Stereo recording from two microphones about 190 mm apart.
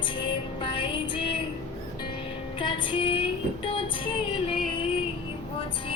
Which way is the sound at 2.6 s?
25° left (ahead or behind).